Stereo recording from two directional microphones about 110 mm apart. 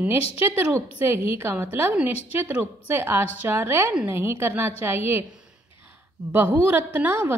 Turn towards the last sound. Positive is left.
turn(degrees=-20)  # may be behind; listen again after turning